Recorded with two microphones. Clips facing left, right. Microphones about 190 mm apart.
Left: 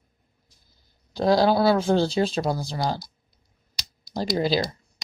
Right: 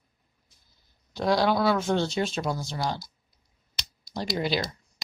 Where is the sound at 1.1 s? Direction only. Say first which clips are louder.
Left 4 dB; 30° left (ahead or behind).